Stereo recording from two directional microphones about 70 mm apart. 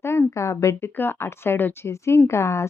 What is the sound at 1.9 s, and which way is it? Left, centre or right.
Speech, left.